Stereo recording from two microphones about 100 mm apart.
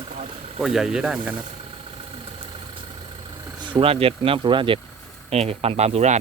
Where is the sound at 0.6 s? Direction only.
5° right (ahead or behind).